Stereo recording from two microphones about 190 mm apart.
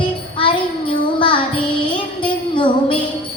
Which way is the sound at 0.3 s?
25° left (ahead or behind).